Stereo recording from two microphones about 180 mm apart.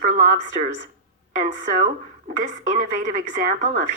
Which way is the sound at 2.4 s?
45° right (ahead or behind).